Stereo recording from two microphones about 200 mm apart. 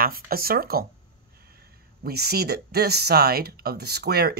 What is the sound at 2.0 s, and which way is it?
Speech, 50° right (ahead or behind).